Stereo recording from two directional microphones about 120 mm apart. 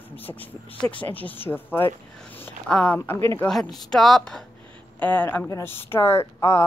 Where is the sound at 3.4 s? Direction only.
5° left (ahead or behind).